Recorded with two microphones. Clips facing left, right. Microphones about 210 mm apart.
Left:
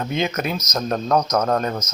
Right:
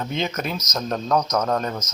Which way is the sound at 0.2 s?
55° left (ahead or behind).